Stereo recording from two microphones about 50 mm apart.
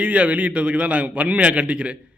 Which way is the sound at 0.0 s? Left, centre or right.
Right.